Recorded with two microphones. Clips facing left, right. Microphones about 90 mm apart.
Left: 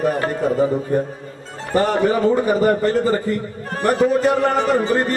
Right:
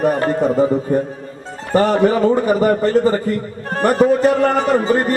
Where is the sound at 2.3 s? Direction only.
15° right (ahead or behind).